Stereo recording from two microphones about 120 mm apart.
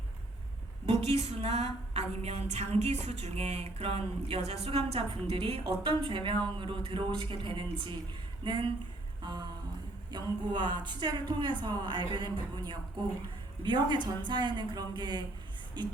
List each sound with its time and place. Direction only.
0.9 s a woman's voice: 60° right (ahead or behind); by 15.9 s 40° right (ahead or behind)